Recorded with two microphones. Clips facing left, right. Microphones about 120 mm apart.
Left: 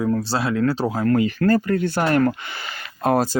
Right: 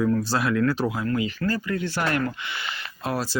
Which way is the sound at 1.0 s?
50° left (ahead or behind).